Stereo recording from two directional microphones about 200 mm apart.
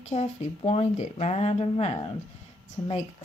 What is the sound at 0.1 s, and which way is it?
A woman's voice, 30° left (ahead or behind).